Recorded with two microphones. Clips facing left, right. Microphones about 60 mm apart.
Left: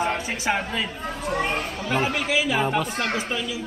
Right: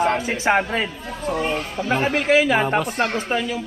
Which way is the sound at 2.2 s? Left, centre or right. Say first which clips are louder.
Right 6 dB; right.